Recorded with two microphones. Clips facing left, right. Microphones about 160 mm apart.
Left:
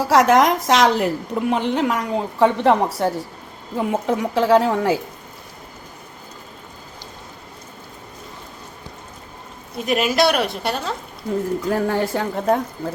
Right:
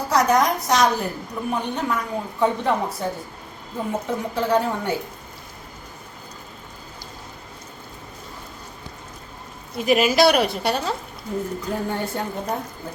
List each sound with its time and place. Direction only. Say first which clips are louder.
0.1 s a woman's voice: left 4 dB; 90° left
9.7 s a woman's voice: right 1 dB; centre (ahead or behind)
11.7 s a woman's voice: left 6 dB; 90° left